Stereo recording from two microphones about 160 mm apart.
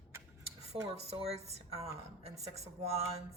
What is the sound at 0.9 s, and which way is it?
A woman's voice, 40° right (ahead or behind).